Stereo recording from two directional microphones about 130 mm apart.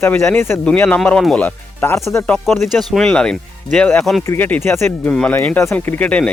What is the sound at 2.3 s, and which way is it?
Speech, centre (ahead or behind).